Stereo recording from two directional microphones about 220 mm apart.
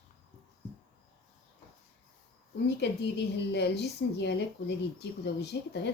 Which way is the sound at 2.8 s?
50° left (ahead or behind).